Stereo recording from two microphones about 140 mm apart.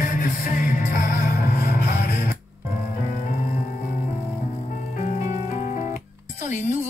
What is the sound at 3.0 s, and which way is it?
Music, 70° left (ahead or behind).